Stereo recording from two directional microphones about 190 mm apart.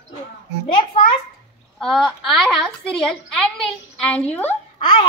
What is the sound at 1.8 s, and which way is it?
A woman's voice, centre (ahead or behind).